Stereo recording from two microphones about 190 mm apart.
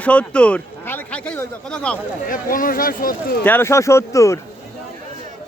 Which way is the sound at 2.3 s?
45° left (ahead or behind).